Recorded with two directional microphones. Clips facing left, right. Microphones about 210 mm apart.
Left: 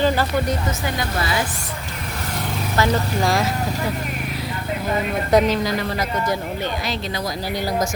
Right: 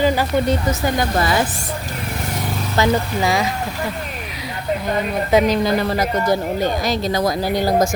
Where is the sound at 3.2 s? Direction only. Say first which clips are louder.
Even; centre (ahead or behind).